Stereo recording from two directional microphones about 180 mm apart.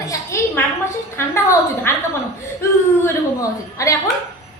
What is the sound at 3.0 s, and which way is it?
Speech, 15° left (ahead or behind).